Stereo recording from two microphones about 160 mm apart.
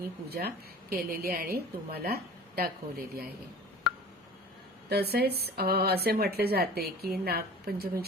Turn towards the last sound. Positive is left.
turn(degrees=-75)  # may be behind; listen again after turning